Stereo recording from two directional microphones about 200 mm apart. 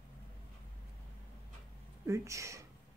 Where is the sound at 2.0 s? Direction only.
15° right (ahead or behind).